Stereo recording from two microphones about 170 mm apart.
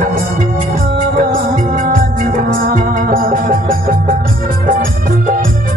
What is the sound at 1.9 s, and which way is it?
Music, 55° right (ahead or behind).